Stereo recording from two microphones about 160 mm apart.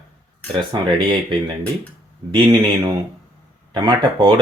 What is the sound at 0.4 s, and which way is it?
Speech, 30° right (ahead or behind).